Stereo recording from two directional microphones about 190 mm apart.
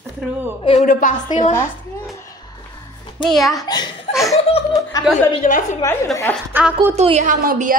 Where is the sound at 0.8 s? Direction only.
45° left (ahead or behind).